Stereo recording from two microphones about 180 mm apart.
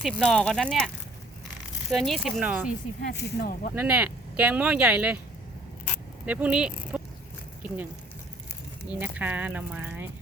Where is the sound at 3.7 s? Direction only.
10° right (ahead or behind).